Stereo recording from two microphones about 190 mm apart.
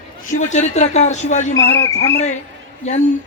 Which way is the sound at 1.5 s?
15° left (ahead or behind).